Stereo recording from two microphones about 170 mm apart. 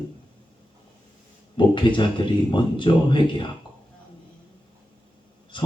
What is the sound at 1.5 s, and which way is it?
Speech, 30° left (ahead or behind).